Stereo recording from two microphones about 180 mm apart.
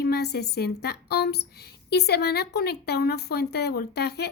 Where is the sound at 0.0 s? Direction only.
65° left (ahead or behind).